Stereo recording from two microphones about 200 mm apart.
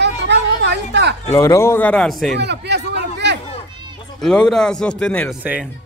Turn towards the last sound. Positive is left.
turn(degrees=-10)  # may be behind; listen again after turning